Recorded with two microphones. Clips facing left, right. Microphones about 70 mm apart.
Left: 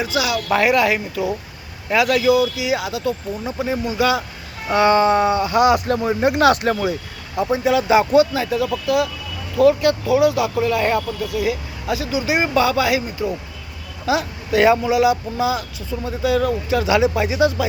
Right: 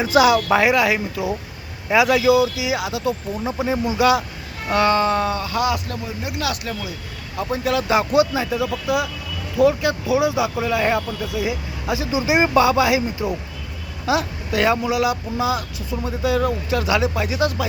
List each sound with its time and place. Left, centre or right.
0.0 s speech: right
0.4 s speech: centre
4.7 s speech: centre
5.9 s speech: left
7.3 s speech: centre
14.0 s speech: centre